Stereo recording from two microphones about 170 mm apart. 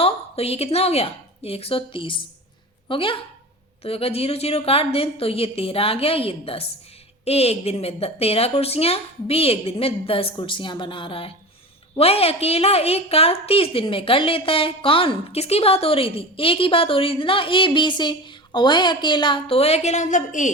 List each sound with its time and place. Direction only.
0.0 s a woman's voice: 35° left (ahead or behind)